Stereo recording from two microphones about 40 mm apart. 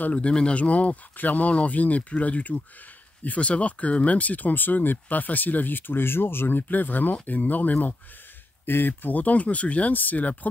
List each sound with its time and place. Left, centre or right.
0.1 s speech: left
6.7 s speech: left
8.6 s speech: left